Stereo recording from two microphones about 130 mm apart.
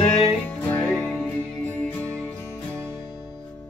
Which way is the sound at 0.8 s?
Centre (ahead or behind).